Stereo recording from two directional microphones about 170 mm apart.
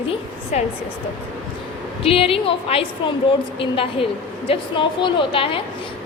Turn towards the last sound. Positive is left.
turn(degrees=30)  # may be behind; listen again after turning